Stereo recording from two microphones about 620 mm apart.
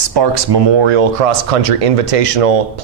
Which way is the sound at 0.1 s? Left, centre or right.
Right.